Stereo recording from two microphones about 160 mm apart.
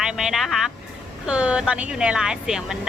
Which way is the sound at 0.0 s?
5° right (ahead or behind).